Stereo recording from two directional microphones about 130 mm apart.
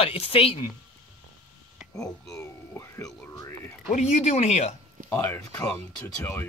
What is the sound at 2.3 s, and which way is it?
Speech, 20° left (ahead or behind).